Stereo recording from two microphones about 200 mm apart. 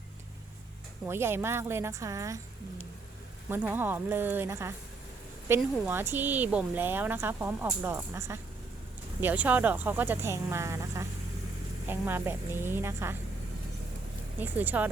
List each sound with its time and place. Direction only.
1.0 s speech: 10° right (ahead or behind)
3.5 s speech: 10° right (ahead or behind)
14.3 s speech: 10° right (ahead or behind)